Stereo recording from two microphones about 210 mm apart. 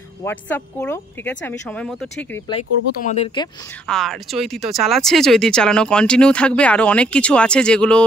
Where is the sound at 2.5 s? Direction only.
30° left (ahead or behind).